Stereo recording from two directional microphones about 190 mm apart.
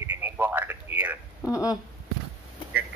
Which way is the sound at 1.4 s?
15° left (ahead or behind).